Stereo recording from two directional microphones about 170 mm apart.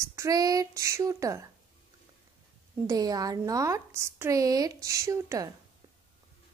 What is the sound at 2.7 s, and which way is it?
A woman's voice, 20° right (ahead or behind).